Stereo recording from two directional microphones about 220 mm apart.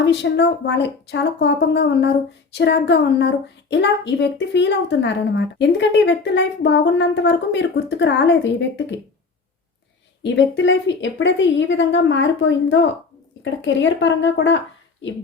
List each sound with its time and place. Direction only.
0.0 s speech: 50° left (ahead or behind)
10.2 s a woman's voice: 55° left (ahead or behind)